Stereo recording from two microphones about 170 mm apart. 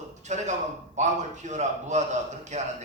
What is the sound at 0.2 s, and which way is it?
A man's voice, 45° right (ahead or behind).